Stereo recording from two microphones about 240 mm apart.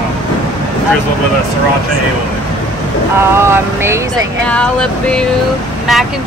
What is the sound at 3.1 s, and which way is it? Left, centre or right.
Vehicle, centre.